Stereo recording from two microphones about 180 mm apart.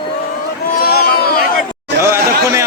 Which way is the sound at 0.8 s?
55° left (ahead or behind).